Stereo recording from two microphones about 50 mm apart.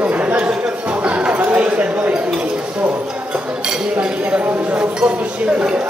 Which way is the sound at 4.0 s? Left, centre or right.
Right.